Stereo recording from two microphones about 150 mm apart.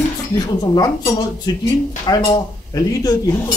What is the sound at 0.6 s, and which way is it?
Speech, 25° left (ahead or behind).